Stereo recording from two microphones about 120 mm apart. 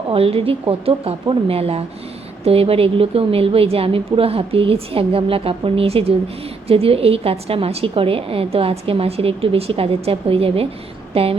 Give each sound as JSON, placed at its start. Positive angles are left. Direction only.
{"t": 0.1, "sound": "a woman's voice", "side_deg": -55}